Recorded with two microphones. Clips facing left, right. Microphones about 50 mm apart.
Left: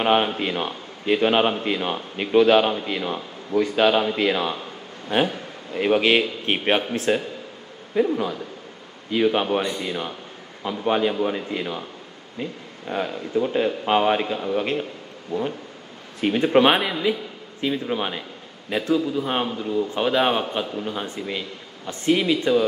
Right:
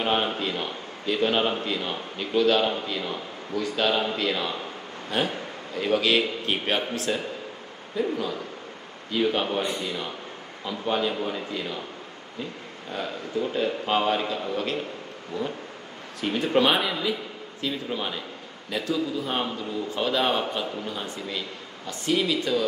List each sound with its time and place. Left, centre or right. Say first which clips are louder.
0.0 s a man's voice: left 5 dB; left
12.9 s a man's voice: left 5 dB; left
16.2 s a man's voice: left 5 dB; left